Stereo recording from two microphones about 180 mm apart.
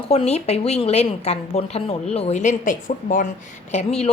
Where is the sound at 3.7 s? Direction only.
35° left (ahead or behind).